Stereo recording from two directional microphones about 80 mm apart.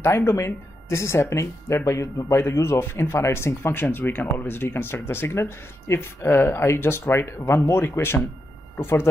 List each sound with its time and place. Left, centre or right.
0.0 s a man's voice: left